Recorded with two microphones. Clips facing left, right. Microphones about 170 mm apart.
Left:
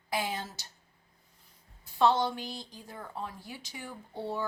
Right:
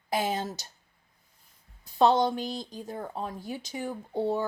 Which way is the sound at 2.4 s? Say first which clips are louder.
Right 7 dB; 20° right (ahead or behind).